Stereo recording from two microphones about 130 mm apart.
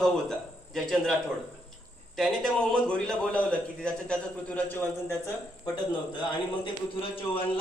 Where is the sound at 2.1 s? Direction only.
5° left (ahead or behind); by 5.7 s 20° left (ahead or behind).